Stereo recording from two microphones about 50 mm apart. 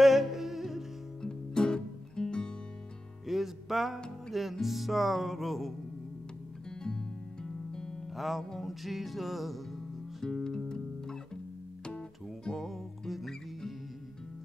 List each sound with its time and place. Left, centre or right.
0.0 s music: centre
1.2 s music: centre
3.3 s music: centre
6.8 s music: centre
8.2 s music: centre
10.2 s music: centre
12.4 s music: centre